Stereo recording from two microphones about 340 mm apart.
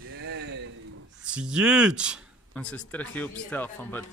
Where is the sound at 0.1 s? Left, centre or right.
Right.